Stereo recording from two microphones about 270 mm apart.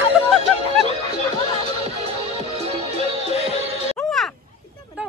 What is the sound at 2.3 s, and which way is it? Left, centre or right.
Music, right.